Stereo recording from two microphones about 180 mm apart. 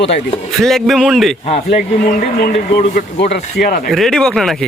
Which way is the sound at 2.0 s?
60° left (ahead or behind).